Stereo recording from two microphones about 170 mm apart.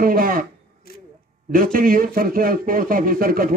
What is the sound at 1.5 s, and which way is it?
A man's voice, 55° right (ahead or behind).